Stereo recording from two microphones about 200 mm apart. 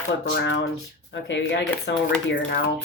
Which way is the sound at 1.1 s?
65° left (ahead or behind).